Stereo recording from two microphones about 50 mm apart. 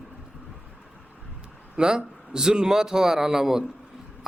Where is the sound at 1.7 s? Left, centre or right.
Centre.